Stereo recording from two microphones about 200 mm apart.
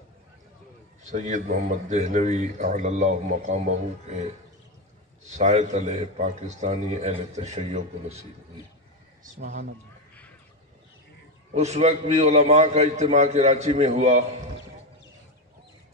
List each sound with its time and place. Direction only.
1.0 s a man's voice: 40° right (ahead or behind)
5.2 s a man's voice: 35° right (ahead or behind)
9.2 s a man's voice: 40° right (ahead or behind)
11.5 s a man's voice: 35° right (ahead or behind)